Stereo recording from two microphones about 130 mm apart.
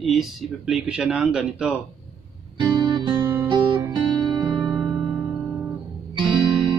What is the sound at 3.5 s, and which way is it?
Music, 35° right (ahead or behind).